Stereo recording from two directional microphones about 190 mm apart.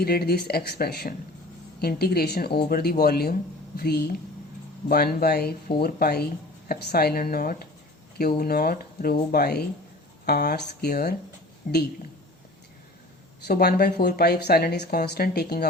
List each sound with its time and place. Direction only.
0.0 s speech: 55° left (ahead or behind)
11.6 s speech: 45° left (ahead or behind)
13.4 s speech: 55° left (ahead or behind)